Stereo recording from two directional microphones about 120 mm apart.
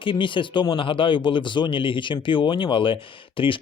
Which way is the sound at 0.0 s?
45° left (ahead or behind).